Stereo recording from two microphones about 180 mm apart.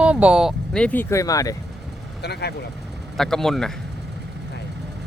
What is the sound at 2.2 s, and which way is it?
Speech, 65° left (ahead or behind).